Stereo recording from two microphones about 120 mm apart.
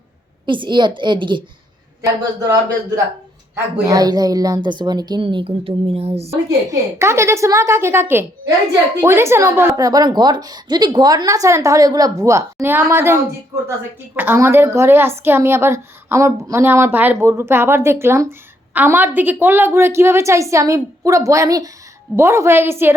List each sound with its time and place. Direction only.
0.4 s speech: 40° right (ahead or behind)
2.0 s a woman's voice: 30° right (ahead or behind); by 6.3 s 60° right (ahead or behind)
6.3 s a woman's voice: 20° right (ahead or behind)